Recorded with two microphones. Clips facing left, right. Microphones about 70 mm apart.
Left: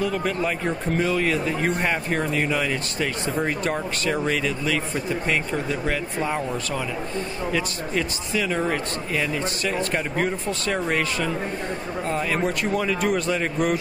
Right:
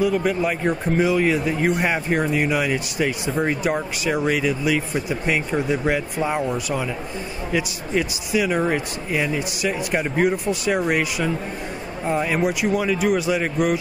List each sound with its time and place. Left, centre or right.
0.0 s a man's voice: centre